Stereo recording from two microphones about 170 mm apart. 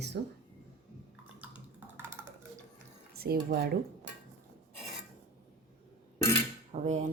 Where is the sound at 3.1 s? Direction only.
65° right (ahead or behind).